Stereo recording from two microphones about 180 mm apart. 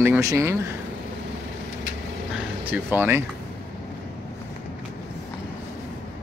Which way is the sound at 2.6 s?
10° right (ahead or behind).